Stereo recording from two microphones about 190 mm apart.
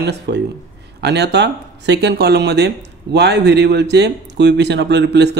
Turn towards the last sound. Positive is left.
turn(degrees=-60)  # may be behind; listen again after turning